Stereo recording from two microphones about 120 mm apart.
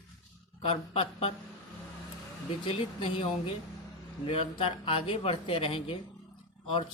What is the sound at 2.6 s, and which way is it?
Speech, 50° left (ahead or behind).